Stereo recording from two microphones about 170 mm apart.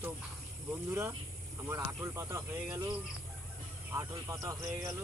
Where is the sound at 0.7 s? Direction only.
15° right (ahead or behind).